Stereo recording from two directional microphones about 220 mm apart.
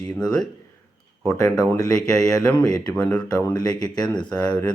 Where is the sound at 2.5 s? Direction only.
15° left (ahead or behind).